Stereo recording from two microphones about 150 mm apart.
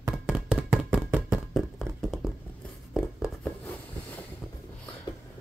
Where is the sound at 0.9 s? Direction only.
5° right (ahead or behind).